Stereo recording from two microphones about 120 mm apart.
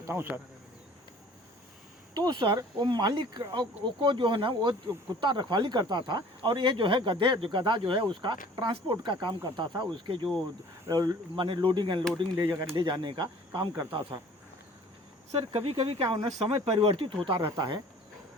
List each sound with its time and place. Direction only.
0.0 s speech: 20° right (ahead or behind)
2.1 s speech: 35° right (ahead or behind)
11.4 s speech: 45° right (ahead or behind)
12.5 s speech: 30° right (ahead or behind)
15.3 s speech: 50° right (ahead or behind)
17.5 s speech: 35° right (ahead or behind)